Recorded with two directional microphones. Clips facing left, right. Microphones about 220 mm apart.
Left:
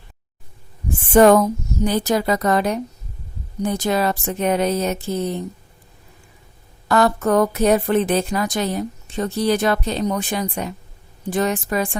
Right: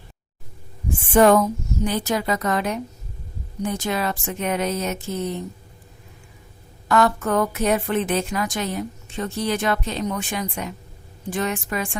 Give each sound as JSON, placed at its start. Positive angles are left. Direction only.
{"t": 1.1, "sound": "a woman's voice", "side_deg": 40}
{"t": 6.8, "sound": "a woman's voice", "side_deg": 35}